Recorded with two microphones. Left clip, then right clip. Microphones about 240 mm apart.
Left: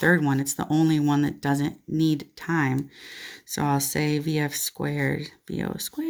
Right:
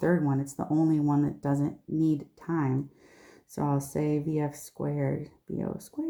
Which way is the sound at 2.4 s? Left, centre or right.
Left.